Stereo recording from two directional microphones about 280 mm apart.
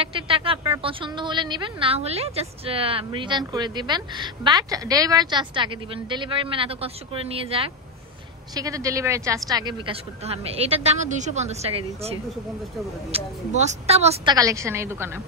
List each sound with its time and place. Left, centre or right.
0.0 s a woman's voice: centre